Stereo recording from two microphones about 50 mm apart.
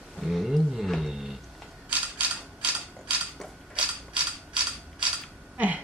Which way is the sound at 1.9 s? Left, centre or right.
Right.